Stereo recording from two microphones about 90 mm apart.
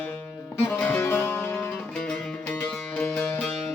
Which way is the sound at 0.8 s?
25° left (ahead or behind).